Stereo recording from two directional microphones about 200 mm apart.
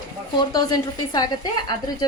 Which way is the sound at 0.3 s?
20° left (ahead or behind).